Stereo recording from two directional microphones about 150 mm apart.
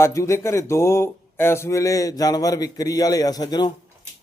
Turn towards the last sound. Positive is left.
turn(degrees=30)  # may be behind; listen again after turning